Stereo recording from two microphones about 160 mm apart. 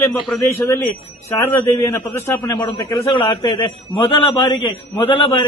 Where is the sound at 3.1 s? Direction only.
35° left (ahead or behind).